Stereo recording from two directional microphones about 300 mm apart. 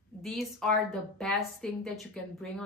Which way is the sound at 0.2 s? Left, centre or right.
Centre.